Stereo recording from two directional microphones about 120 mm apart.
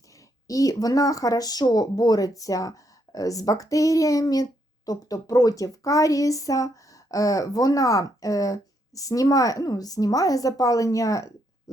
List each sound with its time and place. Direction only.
0.4 s speech: 30° left (ahead or behind)